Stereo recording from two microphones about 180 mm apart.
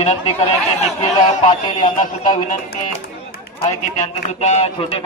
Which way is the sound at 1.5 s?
35° left (ahead or behind).